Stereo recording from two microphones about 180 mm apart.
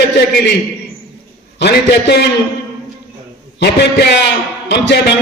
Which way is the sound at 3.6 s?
65° left (ahead or behind).